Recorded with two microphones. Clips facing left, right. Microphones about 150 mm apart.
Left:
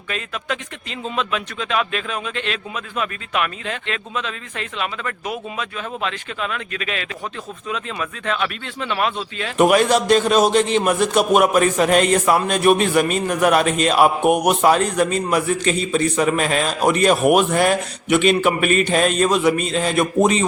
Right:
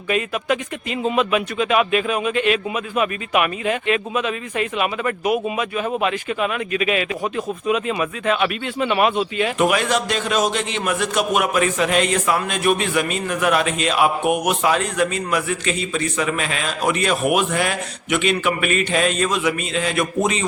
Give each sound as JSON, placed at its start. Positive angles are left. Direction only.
{"t": 0.1, "sound": "speech", "side_deg": -10}
{"t": 9.6, "sound": "a man's voice", "side_deg": 40}